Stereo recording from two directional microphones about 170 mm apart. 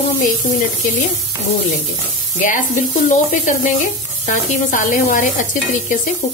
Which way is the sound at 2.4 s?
50° left (ahead or behind).